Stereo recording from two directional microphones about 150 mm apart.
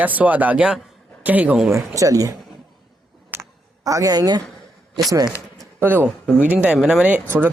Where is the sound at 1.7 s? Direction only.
20° right (ahead or behind).